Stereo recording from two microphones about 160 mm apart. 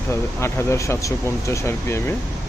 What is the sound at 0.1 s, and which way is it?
Speech, 15° left (ahead or behind).